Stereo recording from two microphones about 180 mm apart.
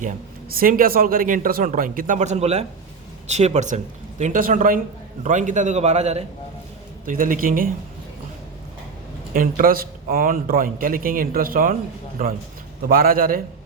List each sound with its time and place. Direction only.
0.5 s a man's voice: 50° right (ahead or behind); by 6.2 s 35° right (ahead or behind)
7.0 s a man's voice: 50° right (ahead or behind)
9.3 s a man's voice: 50° right (ahead or behind)
12.9 s a man's voice: 55° right (ahead or behind)